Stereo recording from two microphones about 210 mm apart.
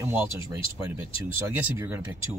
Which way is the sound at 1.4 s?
10° right (ahead or behind).